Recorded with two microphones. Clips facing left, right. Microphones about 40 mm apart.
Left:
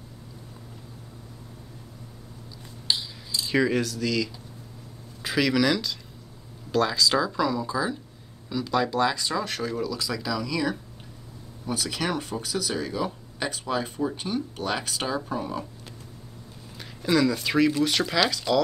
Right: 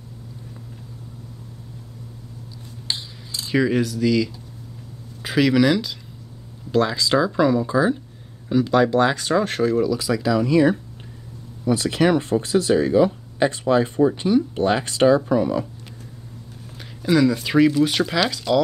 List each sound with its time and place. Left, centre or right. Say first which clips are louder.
3.4 s speech: right 4 dB; centre; by 9.1 s right
9.1 s speech: right 7 dB; right
9.6 s speech: right 9 dB; centre
10.4 s speech: right 11 dB; right
11.9 s speech: right 12 dB; right
15.1 s speech: right 10 dB; right
17.0 s speech: right 5 dB; centre